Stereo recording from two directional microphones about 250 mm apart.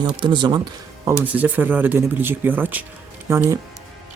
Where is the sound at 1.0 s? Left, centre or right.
Centre.